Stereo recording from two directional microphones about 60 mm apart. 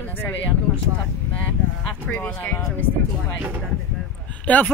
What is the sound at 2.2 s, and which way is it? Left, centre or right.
Speech, left.